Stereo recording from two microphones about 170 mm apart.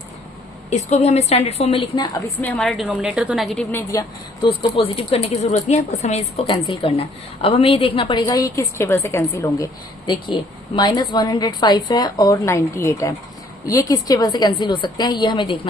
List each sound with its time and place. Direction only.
0.7 s speech: 40° left (ahead or behind)
2.2 s a woman's voice: 10° left (ahead or behind)
4.4 s a woman's voice: 30° left (ahead or behind)